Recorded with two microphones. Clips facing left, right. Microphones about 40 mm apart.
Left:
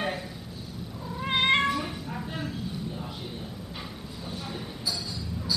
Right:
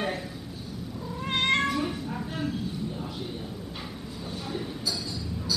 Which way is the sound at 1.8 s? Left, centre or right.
Centre.